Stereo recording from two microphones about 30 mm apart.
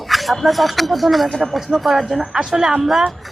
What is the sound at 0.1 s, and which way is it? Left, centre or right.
Speech, centre.